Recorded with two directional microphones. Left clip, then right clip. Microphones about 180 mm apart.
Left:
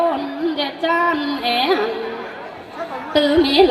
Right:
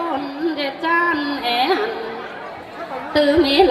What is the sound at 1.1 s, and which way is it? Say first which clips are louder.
Child singing: even; 30° left (ahead or behind).